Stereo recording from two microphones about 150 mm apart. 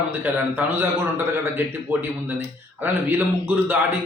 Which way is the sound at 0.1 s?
15° right (ahead or behind).